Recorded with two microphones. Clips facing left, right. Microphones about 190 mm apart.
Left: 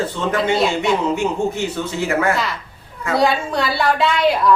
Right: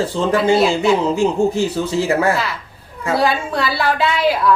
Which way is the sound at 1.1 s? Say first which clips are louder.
Right 4 dB; 35° right (ahead or behind).